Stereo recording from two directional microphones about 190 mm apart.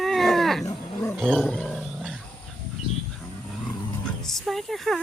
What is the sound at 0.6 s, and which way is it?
Roaring cats, 15° left (ahead or behind).